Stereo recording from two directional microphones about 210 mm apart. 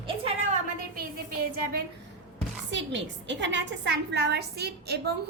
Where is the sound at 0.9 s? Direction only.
45° right (ahead or behind).